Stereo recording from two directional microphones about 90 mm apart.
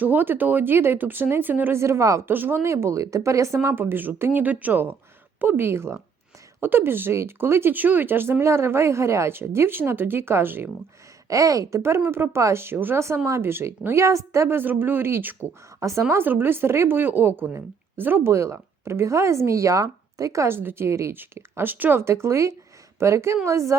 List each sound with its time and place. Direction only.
0.0 s speech: 20° right (ahead or behind)
11.3 s speech: 40° right (ahead or behind); by 15.4 s 25° right (ahead or behind)
15.8 s speech: 35° right (ahead or behind)